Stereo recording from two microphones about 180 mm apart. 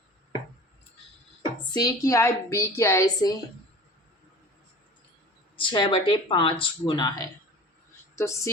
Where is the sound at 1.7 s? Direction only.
20° left (ahead or behind).